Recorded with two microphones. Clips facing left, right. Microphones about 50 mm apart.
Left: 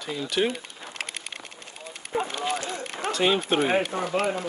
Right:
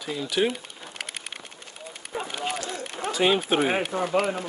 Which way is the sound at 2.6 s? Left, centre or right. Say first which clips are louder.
Even; left.